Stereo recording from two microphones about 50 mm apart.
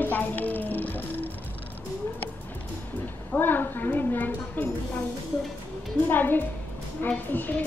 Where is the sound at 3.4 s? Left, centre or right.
Left.